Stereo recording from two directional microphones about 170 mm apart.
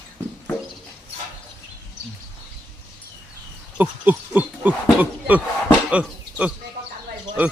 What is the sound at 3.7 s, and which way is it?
Speech, 10° right (ahead or behind).